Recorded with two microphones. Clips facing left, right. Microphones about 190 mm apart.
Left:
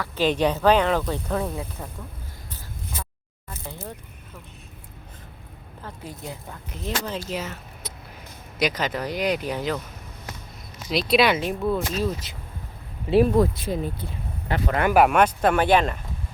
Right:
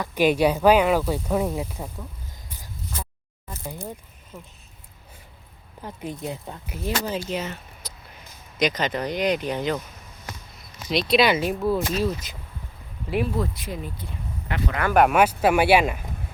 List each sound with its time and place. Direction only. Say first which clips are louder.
0.0 s speech: right 2 dB; 10° right (ahead or behind)
5.8 s speech: right 5 dB; 20° right (ahead or behind)
6.7 s speech: right 2 dB; 5° right (ahead or behind)
10.8 s speech: even; centre (ahead or behind)
13.6 s speech: left 6 dB; 30° left (ahead or behind)
14.9 s speech: right 1 dB; centre (ahead or behind)